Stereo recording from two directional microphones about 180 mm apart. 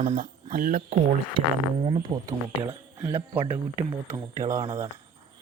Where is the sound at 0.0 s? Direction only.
40° right (ahead or behind).